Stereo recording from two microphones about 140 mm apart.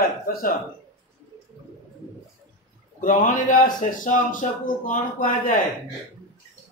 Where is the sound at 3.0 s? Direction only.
70° left (ahead or behind).